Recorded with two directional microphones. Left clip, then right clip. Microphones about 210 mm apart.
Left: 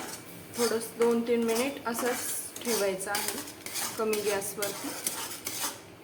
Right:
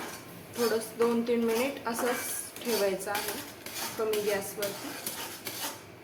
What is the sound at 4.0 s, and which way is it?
Dishes, 15° left (ahead or behind).